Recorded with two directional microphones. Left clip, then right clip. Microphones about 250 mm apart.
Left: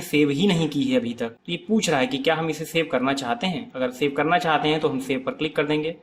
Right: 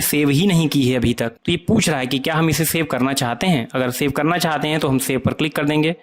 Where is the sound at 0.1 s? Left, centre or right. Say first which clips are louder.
Right 1 dB; right.